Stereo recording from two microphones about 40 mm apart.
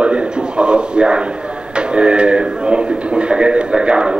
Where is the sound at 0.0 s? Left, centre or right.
Right.